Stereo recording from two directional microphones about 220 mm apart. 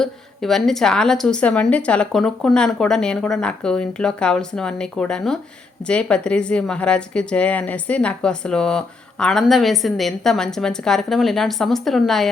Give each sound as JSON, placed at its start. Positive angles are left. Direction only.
{"t": 0.0, "sound": "a woman's voice", "side_deg": 0}